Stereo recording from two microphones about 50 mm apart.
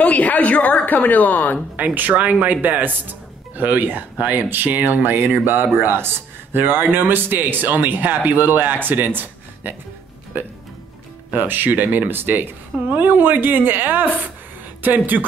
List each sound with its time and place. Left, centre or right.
0.0 s a woman's voice: left
2.0 s speech: right
11.3 s speech: right